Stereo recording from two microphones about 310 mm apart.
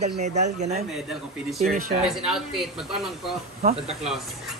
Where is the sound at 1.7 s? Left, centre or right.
Right.